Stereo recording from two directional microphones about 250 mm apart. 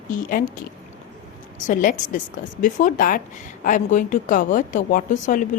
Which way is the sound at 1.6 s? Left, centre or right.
Left.